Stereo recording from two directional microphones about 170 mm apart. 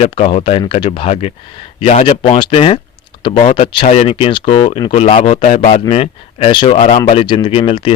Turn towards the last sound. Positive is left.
turn(degrees=35)  # may be behind; listen again after turning